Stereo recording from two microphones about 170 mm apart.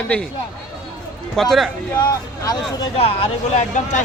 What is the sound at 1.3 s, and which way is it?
Speech, centre (ahead or behind).